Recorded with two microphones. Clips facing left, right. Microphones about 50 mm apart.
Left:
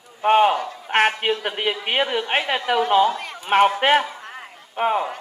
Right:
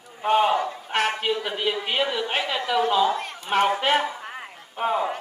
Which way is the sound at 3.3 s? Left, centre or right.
Left.